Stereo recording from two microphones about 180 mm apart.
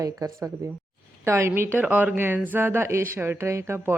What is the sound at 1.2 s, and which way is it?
A woman's voice, 15° right (ahead or behind).